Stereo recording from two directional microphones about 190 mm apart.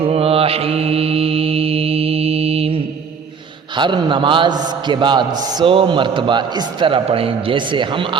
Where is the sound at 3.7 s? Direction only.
25° right (ahead or behind).